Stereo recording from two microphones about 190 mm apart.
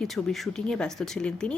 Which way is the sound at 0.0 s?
Centre (ahead or behind).